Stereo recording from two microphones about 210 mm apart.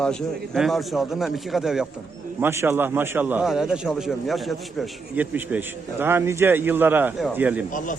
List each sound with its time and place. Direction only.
0.0 s a man's voice: centre (ahead or behind)
7.7 s a man's voice: 40° left (ahead or behind)